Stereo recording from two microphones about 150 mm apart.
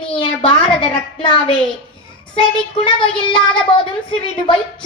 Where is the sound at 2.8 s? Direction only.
30° left (ahead or behind).